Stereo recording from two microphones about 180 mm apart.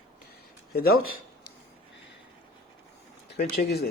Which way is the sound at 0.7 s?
55° left (ahead or behind).